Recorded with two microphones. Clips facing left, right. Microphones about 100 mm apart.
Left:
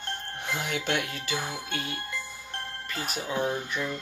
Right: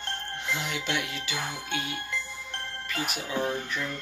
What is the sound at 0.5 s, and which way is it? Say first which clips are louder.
Music: left 2 dB; 50° left (ahead or behind).